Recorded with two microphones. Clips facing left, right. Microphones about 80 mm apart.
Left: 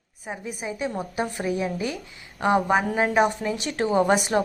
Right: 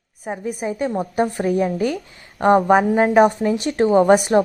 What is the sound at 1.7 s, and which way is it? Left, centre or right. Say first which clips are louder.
A woman's voice: right 8 dB; right.